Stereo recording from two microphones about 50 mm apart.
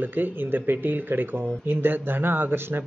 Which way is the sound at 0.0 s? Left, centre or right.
Right.